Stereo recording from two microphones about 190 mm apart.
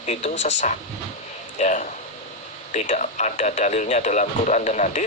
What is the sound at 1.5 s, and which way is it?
Speech, 40° left (ahead or behind).